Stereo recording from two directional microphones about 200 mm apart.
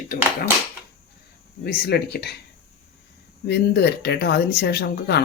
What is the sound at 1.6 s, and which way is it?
Speech, 55° left (ahead or behind).